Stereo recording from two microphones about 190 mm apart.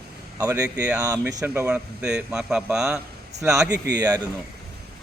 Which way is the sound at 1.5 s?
5° right (ahead or behind).